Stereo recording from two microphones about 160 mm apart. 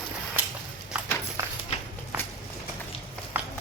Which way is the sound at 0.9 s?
5° right (ahead or behind).